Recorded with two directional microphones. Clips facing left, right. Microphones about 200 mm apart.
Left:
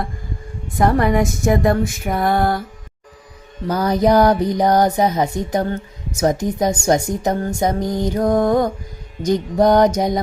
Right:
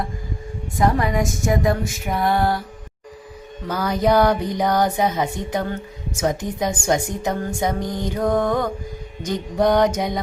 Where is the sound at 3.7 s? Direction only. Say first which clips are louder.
Left 4 dB; 40° left (ahead or behind).